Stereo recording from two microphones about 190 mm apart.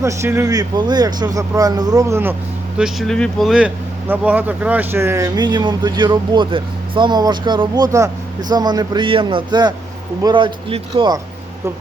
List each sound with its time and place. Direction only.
0.0 s speech: 15° right (ahead or behind)
2.7 s speech: centre (ahead or behind); by 11.2 s 25° right (ahead or behind)